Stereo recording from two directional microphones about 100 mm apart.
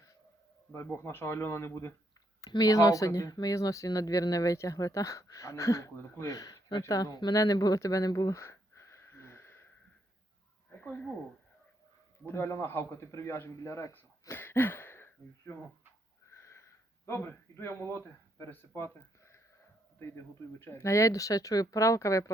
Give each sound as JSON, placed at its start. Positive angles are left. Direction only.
{"t": 1.0, "sound": "speech", "side_deg": 25}
{"t": 2.5, "sound": "speech", "side_deg": 35}
{"t": 10.7, "sound": "speech", "side_deg": 15}
{"t": 12.2, "sound": "a man's voice", "side_deg": 25}
{"t": 16.3, "sound": "wheeze", "side_deg": 30}
{"t": 17.1, "sound": "speech", "side_deg": 25}
{"t": 20.0, "sound": "speech", "side_deg": 25}